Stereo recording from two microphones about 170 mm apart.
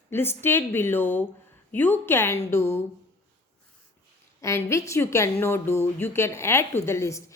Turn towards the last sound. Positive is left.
turn(degrees=15)  # may be behind; listen again after turning